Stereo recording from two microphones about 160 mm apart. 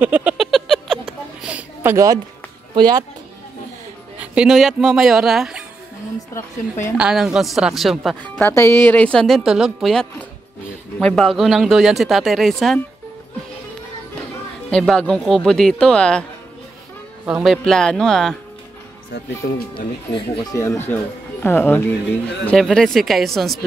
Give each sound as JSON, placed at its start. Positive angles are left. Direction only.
{"t": 0.0, "sound": "a sound", "side_deg": -10}
{"t": 2.7, "sound": "speech", "side_deg": -25}
{"t": 4.2, "sound": "speech", "side_deg": -5}
{"t": 6.3, "sound": "speech", "side_deg": 20}
{"t": 7.0, "sound": "speech", "side_deg": -5}
{"t": 8.5, "sound": "speech", "side_deg": 15}
{"t": 14.7, "sound": "speech", "side_deg": 5}
{"t": 17.4, "sound": "speech", "side_deg": 0}
{"t": 19.4, "sound": "speech", "side_deg": 75}
{"t": 20.5, "sound": "speech", "side_deg": 20}